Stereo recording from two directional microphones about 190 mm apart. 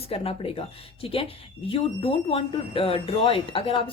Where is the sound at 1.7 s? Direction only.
30° left (ahead or behind).